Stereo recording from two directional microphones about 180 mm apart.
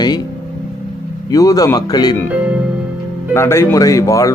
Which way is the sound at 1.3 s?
20° left (ahead or behind).